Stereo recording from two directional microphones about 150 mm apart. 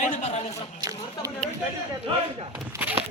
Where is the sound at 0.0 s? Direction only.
50° left (ahead or behind).